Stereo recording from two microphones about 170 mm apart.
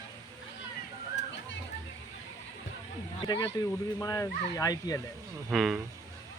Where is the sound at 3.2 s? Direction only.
25° left (ahead or behind).